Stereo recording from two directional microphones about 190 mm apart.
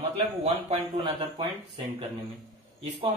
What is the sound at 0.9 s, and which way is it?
Speech, 20° right (ahead or behind).